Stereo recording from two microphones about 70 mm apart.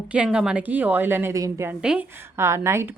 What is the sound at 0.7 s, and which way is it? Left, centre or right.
Speech, right.